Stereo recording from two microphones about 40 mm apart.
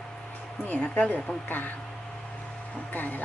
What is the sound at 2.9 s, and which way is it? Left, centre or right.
Speech, left.